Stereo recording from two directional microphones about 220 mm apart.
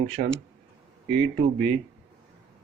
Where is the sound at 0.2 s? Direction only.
40° right (ahead or behind).